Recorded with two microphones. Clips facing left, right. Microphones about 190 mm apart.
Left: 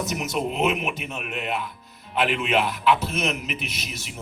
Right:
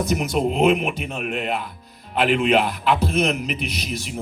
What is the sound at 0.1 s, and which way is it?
Speech, 40° right (ahead or behind).